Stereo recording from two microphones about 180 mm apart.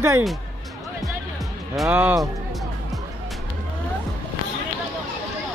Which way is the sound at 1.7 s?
5° right (ahead or behind).